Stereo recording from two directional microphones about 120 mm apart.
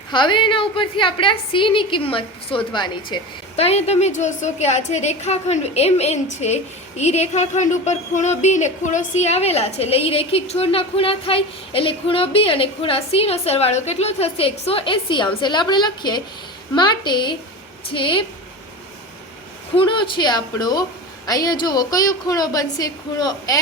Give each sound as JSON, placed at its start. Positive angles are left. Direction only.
{"t": 0.1, "sound": "a woman's voice", "side_deg": 40}
{"t": 3.5, "sound": "a woman's voice", "side_deg": 60}
{"t": 19.7, "sound": "a woman's voice", "side_deg": 45}